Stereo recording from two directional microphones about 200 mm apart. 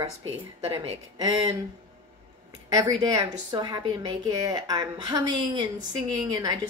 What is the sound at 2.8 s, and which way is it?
A woman's voice, 20° right (ahead or behind).